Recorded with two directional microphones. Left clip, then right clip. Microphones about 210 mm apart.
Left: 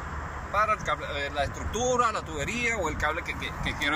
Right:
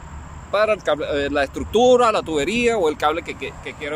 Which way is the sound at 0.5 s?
50° right (ahead or behind).